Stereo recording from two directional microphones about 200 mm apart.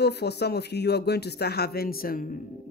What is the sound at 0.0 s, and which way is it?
Speech, 55° left (ahead or behind).